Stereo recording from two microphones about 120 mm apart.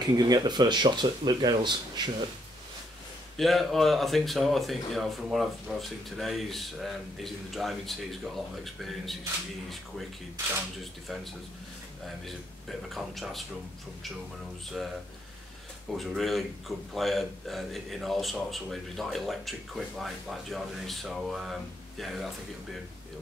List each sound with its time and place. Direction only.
0.0 s speech: 35° right (ahead or behind)
3.3 s a man's voice: centre (ahead or behind)
12.3 s a man's voice: centre (ahead or behind)
15.9 s a man's voice: centre (ahead or behind)